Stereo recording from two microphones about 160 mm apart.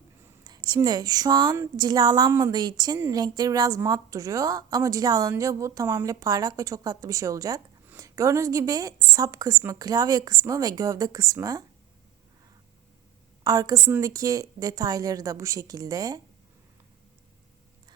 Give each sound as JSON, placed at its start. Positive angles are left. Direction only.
{"t": 0.4, "sound": "a woman's voice", "side_deg": -25}
{"t": 13.4, "sound": "a woman's voice", "side_deg": -20}